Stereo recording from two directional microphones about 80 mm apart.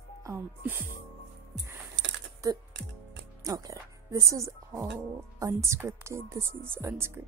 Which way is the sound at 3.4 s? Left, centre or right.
Right.